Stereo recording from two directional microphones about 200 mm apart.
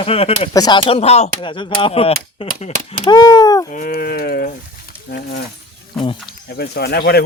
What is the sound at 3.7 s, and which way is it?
Speech, 50° left (ahead or behind).